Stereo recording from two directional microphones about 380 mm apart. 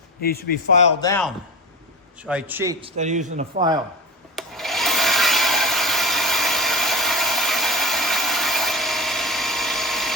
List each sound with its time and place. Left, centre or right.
0.2 s a man's voice: left
1.0 s a man's voice: centre
2.2 s a man's voice: centre
4.4 s wood: centre